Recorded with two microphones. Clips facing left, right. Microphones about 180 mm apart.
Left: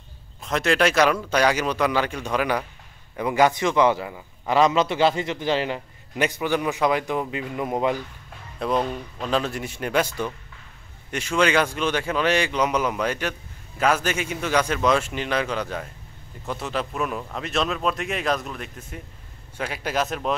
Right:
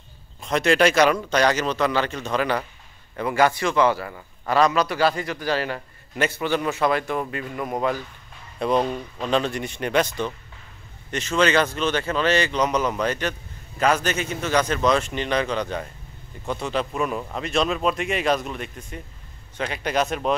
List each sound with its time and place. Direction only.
0.4 s a man's voice: centre (ahead or behind); by 8.0 s 20° left (ahead or behind)
8.5 s a man's voice: centre (ahead or behind)